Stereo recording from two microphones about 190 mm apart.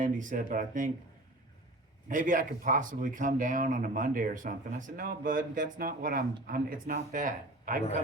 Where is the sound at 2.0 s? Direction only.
45° right (ahead or behind).